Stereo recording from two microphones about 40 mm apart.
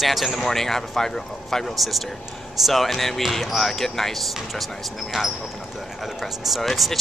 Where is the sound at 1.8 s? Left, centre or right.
Centre.